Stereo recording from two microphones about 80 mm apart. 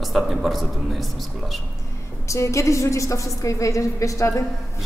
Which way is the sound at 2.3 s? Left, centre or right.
Left.